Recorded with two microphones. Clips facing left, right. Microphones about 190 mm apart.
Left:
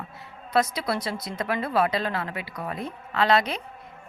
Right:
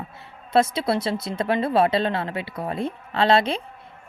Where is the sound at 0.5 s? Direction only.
25° right (ahead or behind).